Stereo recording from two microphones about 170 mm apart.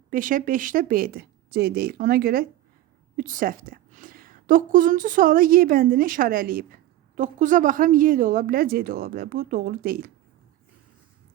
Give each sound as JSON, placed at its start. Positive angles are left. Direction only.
{"t": 0.1, "sound": "a woman's voice", "side_deg": -50}
{"t": 7.2, "sound": "a woman's voice", "side_deg": -50}